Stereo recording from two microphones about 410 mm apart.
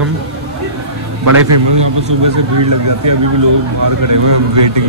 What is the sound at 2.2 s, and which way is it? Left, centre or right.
A man's voice, right.